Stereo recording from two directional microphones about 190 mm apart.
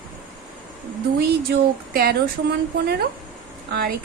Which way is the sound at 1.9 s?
55° right (ahead or behind).